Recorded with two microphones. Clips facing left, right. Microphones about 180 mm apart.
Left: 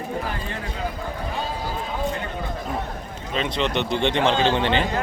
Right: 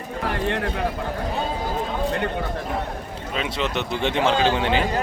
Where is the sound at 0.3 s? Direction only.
70° right (ahead or behind).